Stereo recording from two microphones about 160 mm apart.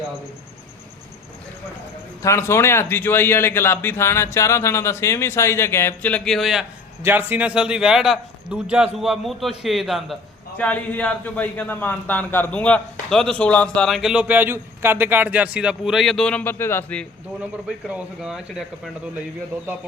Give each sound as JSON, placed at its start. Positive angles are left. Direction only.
{"t": 2.2, "sound": "a man's voice", "side_deg": 15}
{"t": 7.0, "sound": "a man's voice", "side_deg": -10}
{"t": 17.7, "sound": "a man's voice", "side_deg": -5}